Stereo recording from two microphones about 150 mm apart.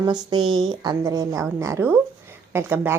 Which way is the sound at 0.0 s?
25° right (ahead or behind).